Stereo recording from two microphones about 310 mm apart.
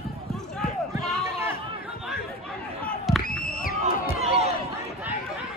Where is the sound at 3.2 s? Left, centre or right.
Left.